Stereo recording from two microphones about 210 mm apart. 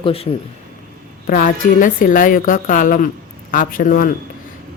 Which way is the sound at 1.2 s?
40° left (ahead or behind).